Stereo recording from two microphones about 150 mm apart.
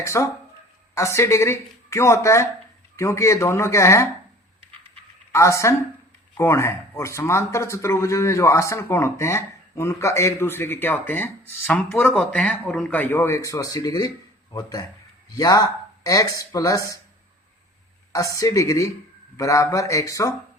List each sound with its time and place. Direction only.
0.0 s speech: 20° left (ahead or behind)
5.3 s speech: 20° left (ahead or behind)
18.1 s speech: 20° left (ahead or behind)